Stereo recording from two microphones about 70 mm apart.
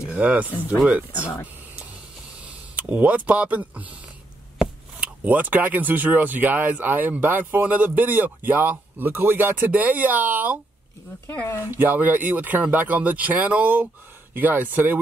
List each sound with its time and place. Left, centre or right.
0.0 s speech: right
2.4 s a sound: right
3.3 s speech: right
5.0 s speech: right
11.7 s speech: right